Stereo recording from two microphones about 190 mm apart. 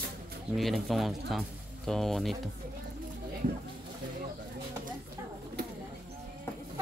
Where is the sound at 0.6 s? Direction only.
Centre (ahead or behind).